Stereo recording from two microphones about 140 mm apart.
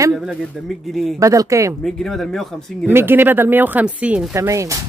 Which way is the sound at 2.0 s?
Centre (ahead or behind).